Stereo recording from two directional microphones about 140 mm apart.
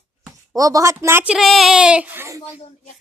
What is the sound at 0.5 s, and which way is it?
Speech, 25° right (ahead or behind).